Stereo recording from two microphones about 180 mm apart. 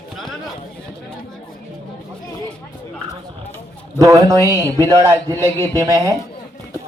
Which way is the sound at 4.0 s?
20° right (ahead or behind).